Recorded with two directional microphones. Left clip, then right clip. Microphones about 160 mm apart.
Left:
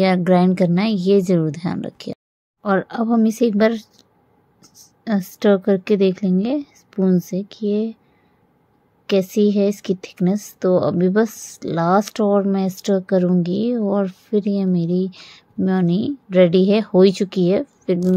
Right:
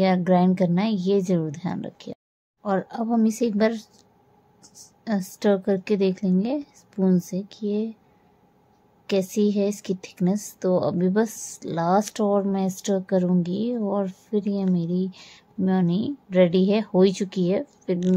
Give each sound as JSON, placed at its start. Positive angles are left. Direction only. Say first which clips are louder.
{"t": 0.0, "sound": "a woman's voice", "louder": "left 4 dB", "side_deg": 20}
{"t": 9.0, "sound": "a woman's voice", "louder": "left 6 dB", "side_deg": 20}